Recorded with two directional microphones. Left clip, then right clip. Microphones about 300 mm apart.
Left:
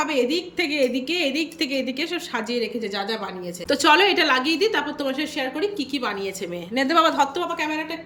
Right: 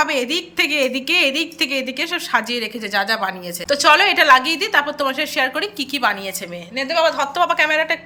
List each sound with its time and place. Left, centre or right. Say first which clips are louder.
0.0 s a woman's voice: right 3 dB; centre
6.7 s a woman's voice: right 1 dB; centre